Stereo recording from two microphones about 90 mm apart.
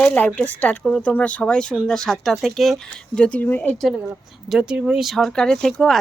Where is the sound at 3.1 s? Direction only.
10° left (ahead or behind).